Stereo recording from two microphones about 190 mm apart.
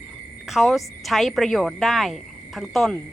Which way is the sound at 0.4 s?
Centre (ahead or behind).